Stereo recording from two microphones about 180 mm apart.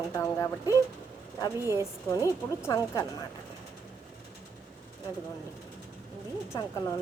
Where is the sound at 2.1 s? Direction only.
15° left (ahead or behind).